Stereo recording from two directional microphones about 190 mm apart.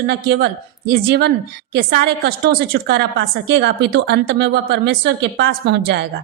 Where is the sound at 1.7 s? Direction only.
55° right (ahead or behind).